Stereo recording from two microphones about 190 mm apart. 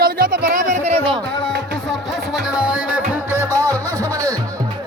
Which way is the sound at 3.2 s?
15° right (ahead or behind).